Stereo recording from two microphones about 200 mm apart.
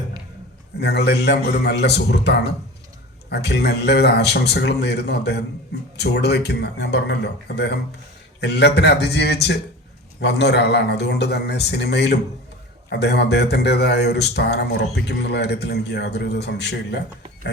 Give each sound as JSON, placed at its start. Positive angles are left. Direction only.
{"t": 0.8, "sound": "speech", "side_deg": 55}